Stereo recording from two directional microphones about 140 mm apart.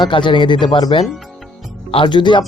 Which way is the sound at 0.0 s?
35° left (ahead or behind).